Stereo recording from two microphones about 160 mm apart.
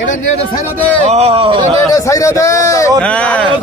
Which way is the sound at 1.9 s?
20° left (ahead or behind).